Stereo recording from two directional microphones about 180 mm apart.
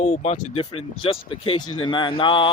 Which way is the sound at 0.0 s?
40° left (ahead or behind).